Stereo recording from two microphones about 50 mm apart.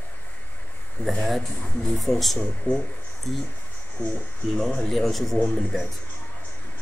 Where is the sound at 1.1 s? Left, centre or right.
Centre.